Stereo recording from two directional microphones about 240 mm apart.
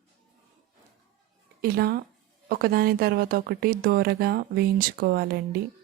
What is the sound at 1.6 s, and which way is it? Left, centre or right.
Speech, right.